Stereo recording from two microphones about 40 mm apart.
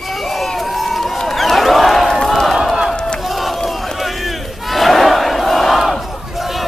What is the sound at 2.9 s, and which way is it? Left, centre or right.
Crowd, centre.